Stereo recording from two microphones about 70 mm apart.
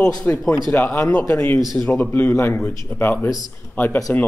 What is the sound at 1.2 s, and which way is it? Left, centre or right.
A man's voice, left.